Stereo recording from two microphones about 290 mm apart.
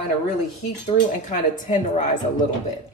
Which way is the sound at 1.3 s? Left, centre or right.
Left.